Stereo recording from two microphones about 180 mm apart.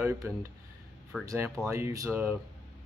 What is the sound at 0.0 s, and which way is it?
Speech, 15° right (ahead or behind).